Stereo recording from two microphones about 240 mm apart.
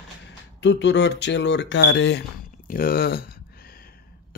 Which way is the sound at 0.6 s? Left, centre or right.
Left.